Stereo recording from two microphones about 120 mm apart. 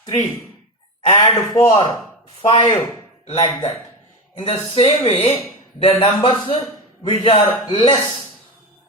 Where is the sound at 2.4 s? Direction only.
55° left (ahead or behind).